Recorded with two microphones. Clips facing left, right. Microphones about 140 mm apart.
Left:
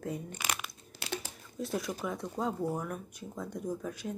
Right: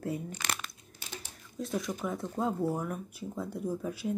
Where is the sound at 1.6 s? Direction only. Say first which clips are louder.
Right 1 dB; centre (ahead or behind).